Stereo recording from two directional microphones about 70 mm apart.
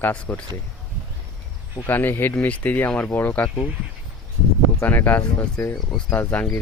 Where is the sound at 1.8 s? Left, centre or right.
Left.